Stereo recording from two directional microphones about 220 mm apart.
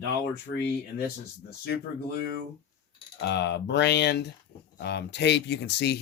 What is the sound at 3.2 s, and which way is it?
Speech, 50° left (ahead or behind).